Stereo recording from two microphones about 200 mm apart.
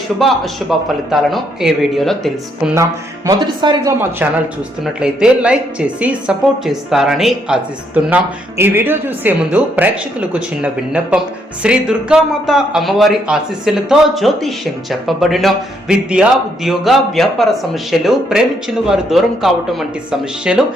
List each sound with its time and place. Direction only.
0.2 s speech: centre (ahead or behind)
2.7 s speech: 15° right (ahead or behind)
4.2 s speech: 10° right (ahead or behind)